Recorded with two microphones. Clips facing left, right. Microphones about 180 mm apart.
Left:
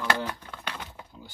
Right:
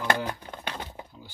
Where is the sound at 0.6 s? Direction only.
25° right (ahead or behind).